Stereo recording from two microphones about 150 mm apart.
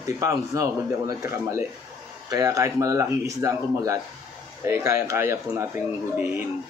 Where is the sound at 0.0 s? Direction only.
20° right (ahead or behind).